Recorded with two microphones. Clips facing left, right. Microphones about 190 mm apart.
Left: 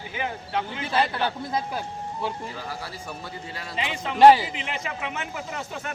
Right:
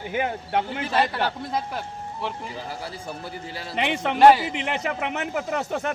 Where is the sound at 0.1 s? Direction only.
55° right (ahead or behind).